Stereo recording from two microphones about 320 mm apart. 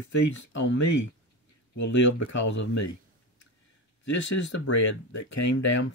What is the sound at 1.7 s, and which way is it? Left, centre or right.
Speech, left.